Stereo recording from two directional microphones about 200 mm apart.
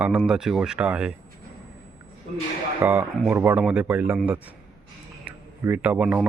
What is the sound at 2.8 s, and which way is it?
A man's voice, 10° right (ahead or behind).